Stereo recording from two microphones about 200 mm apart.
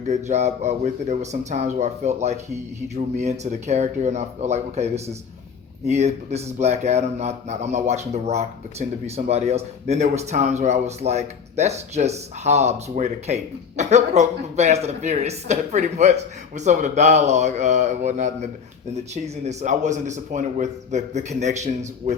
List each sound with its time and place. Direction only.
0.1 s speech: 35° right (ahead or behind)